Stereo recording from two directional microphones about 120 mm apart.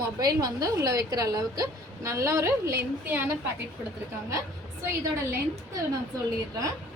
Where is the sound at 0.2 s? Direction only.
35° right (ahead or behind).